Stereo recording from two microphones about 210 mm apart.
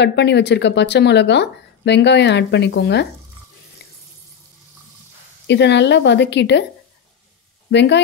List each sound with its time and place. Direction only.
0.0 s speech: 55° left (ahead or behind)
5.5 s speech: 55° left (ahead or behind)
7.7 s speech: 55° left (ahead or behind)